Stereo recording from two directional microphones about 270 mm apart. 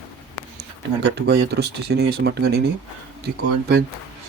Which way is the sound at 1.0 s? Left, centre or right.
Right.